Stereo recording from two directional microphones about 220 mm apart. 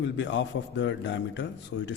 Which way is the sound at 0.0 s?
55° left (ahead or behind).